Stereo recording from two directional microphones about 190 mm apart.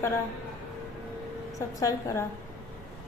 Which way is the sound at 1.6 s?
15° left (ahead or behind).